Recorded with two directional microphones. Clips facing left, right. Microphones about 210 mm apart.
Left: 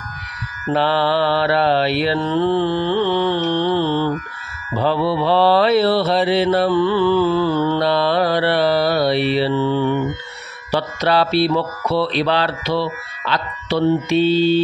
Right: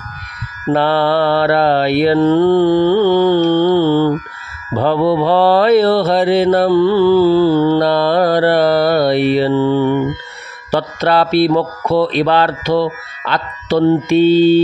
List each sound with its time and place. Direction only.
0.7 s mantra: 50° right (ahead or behind)